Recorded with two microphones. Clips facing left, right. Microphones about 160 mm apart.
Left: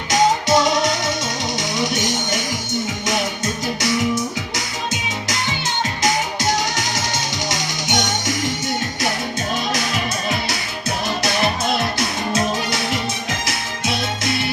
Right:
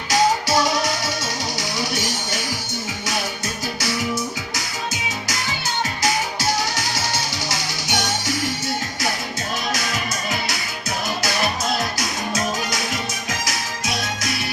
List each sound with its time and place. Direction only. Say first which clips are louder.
0.1 s music: left 3 dB; 20° left (ahead or behind)
3.8 s music: left 4 dB; 25° left (ahead or behind)
6.0 s music: left 4 dB; 20° left (ahead or behind)
11.2 s music: left 4 dB; 25° left (ahead or behind)